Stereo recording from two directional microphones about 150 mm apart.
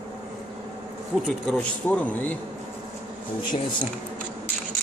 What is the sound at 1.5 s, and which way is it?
Speech, 5° left (ahead or behind).